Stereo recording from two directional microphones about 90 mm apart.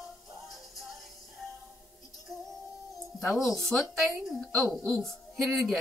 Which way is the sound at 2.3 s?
Centre (ahead or behind).